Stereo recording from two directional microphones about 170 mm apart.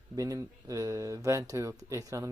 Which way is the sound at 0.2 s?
20° right (ahead or behind).